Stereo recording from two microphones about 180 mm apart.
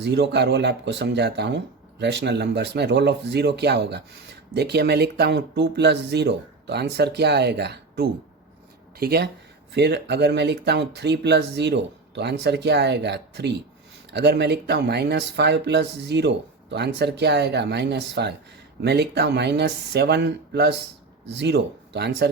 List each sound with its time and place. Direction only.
0.0 s speech: 70° right (ahead or behind)